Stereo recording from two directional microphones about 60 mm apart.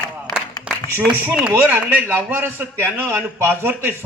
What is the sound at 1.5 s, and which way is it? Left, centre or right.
A man's voice, right.